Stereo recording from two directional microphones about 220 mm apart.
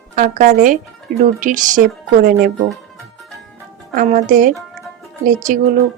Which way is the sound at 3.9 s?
40° right (ahead or behind).